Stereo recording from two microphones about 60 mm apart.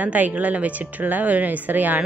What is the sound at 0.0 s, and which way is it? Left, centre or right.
A woman's voice, right.